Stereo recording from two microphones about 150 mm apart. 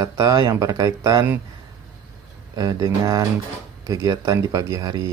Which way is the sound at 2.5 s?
25° right (ahead or behind).